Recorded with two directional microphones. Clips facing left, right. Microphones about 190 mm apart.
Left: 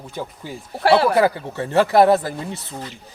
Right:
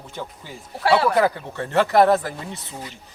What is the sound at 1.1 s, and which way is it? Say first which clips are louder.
Speech: left 2 dB; 5° left (ahead or behind).